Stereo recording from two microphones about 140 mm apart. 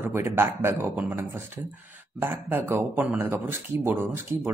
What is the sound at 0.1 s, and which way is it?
A man's voice, 15° right (ahead or behind).